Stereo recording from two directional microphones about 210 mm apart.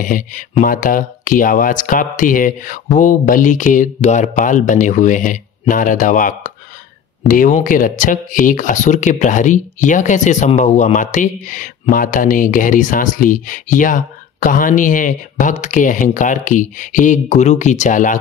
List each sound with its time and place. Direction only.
0.0 s speech: 40° left (ahead or behind)